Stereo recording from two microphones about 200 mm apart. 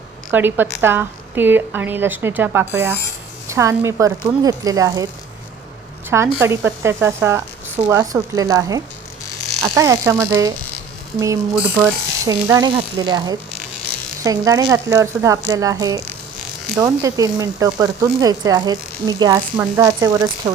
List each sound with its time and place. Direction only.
0.3 s speech: 10° right (ahead or behind)
6.1 s speech: 15° right (ahead or behind)
11.5 s speech: 10° right (ahead or behind)
16.4 s electric shaver: centre (ahead or behind)
16.8 s speech: 15° right (ahead or behind)